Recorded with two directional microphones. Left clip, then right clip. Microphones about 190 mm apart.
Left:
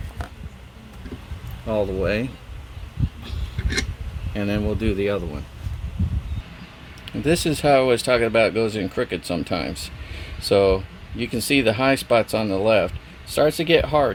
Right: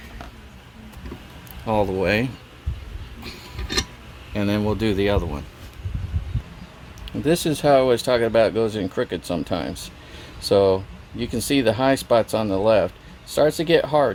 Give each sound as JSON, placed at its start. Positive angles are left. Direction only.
{"t": 1.7, "sound": "speech", "side_deg": -45}
{"t": 4.4, "sound": "speech", "side_deg": -40}
{"t": 7.3, "sound": "speech", "side_deg": 0}